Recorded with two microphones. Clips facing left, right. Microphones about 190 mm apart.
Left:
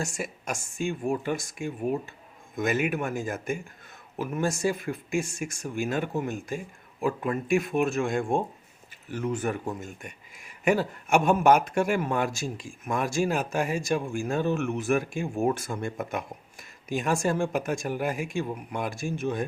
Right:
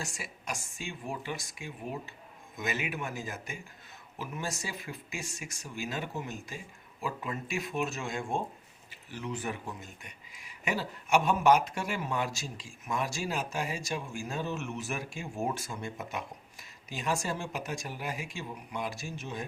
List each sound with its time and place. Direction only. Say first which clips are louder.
0.0 s speech: left 8 dB; 45° left (ahead or behind)